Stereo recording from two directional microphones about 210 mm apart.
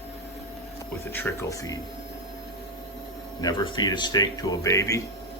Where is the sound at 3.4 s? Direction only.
20° left (ahead or behind).